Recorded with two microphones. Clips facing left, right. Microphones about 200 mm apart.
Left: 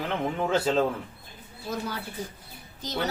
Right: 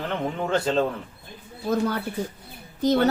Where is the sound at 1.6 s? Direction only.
55° right (ahead or behind).